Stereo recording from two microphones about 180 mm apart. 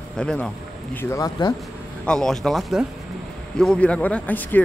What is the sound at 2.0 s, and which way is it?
Speech, 5° left (ahead or behind).